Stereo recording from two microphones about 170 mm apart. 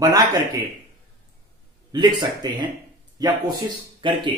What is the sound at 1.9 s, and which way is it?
Speech, 25° right (ahead or behind).